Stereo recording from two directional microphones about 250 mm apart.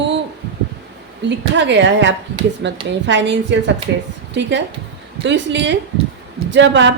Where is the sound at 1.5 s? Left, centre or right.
Right.